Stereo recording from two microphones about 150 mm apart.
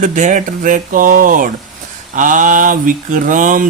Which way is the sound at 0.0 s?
55° right (ahead or behind).